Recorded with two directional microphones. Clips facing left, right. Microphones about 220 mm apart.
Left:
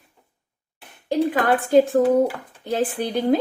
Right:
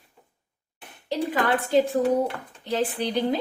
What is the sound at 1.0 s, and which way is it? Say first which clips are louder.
A woman's voice: left 5 dB; 50° left (ahead or behind).